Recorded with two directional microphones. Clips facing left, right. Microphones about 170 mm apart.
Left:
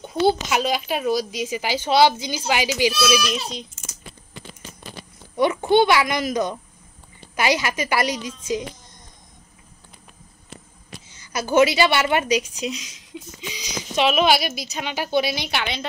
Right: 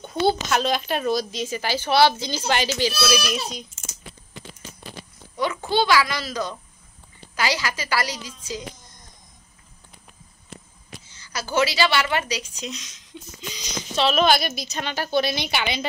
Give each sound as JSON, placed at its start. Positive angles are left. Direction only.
{"t": 0.0, "sound": "a woman's voice", "side_deg": 10}
{"t": 5.3, "sound": "a child's voice", "side_deg": 25}
{"t": 11.1, "sound": "a woman's voice", "side_deg": 20}
{"t": 15.3, "sound": "a woman's voice", "side_deg": 0}